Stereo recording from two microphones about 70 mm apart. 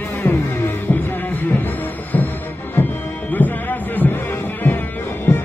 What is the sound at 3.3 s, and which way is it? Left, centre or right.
Music, left.